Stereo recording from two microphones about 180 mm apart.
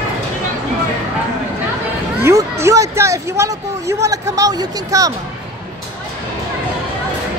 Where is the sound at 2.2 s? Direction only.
15° right (ahead or behind).